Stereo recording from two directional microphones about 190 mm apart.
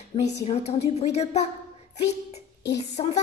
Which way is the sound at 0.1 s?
35° left (ahead or behind).